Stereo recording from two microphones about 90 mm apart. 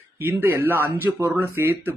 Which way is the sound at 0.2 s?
25° right (ahead or behind).